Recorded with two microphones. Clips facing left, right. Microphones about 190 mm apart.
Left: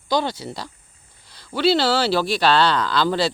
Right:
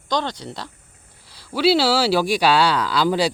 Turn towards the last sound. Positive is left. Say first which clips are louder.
# right 1 dB
turn(degrees=-10)  # may be behind; listen again after turning